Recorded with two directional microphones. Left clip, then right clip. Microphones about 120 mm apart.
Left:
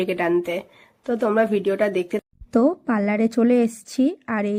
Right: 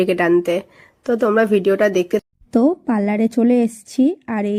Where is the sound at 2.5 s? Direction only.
25° right (ahead or behind).